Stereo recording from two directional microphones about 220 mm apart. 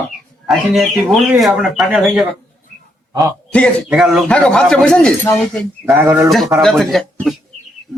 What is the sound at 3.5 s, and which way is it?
Speech, 5° left (ahead or behind).